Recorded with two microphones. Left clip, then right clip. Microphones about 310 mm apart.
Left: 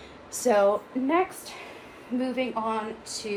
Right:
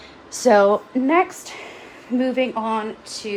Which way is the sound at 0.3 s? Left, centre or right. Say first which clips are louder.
Right 7 dB; right.